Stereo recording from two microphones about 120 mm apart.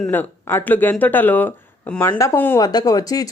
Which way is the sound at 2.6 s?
35° left (ahead or behind).